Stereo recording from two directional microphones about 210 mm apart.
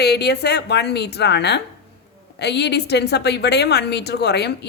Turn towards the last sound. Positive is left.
turn(degrees=50)  # may be behind; listen again after turning